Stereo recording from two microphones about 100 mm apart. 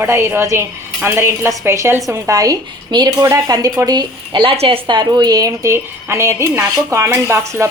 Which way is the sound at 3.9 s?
50° right (ahead or behind).